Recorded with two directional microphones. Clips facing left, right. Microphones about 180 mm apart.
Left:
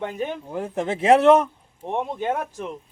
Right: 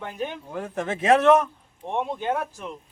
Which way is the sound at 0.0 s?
25° left (ahead or behind).